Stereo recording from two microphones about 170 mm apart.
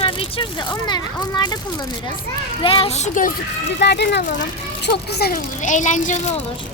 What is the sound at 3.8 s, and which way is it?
Speech, 80° left.